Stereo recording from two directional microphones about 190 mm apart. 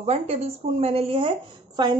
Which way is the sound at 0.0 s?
35° right (ahead or behind).